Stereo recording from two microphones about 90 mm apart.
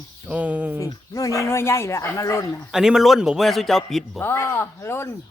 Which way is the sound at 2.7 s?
5° right (ahead or behind).